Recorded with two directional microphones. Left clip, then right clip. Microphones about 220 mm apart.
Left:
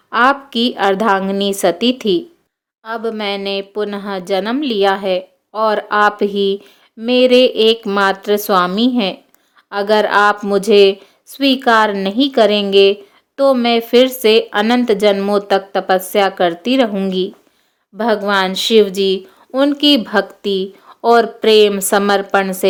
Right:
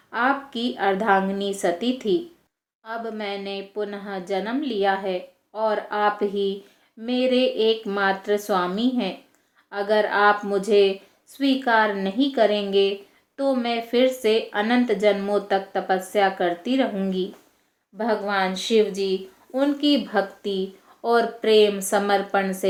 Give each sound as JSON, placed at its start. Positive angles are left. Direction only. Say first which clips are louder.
{"t": 0.1, "sound": "speech", "louder": "left 10 dB", "side_deg": 50}